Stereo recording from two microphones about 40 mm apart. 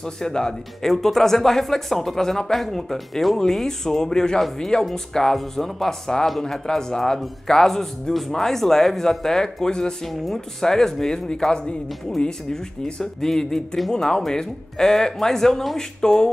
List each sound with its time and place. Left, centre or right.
0.0 s speech: centre
0.9 s speech: centre
10.0 s speech: centre